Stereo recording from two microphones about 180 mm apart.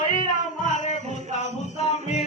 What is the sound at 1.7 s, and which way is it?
Music, 40° left (ahead or behind).